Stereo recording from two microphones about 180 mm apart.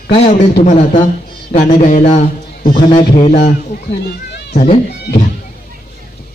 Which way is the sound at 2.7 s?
25° left (ahead or behind).